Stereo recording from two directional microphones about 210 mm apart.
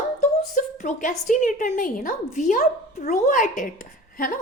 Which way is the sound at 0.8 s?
35° left (ahead or behind).